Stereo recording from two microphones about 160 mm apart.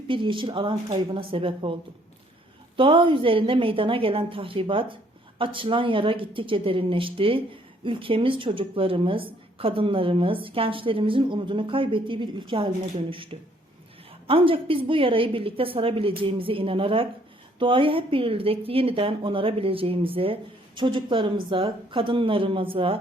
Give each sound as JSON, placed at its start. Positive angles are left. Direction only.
{"t": 0.1, "sound": "a woman's voice", "side_deg": -30}
{"t": 2.7, "sound": "a woman's voice", "side_deg": -35}
{"t": 14.3, "sound": "a woman's voice", "side_deg": -35}